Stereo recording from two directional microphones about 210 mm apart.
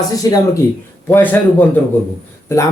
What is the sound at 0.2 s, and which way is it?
Speech, 15° left (ahead or behind).